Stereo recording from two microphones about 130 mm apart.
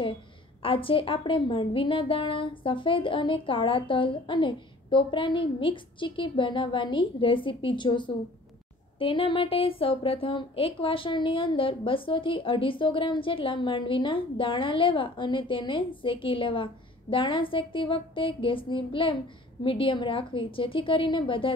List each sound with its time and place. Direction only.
0.6 s speech: 45° left (ahead or behind)